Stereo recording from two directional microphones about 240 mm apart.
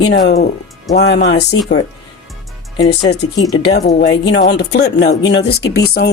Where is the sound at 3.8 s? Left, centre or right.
Left.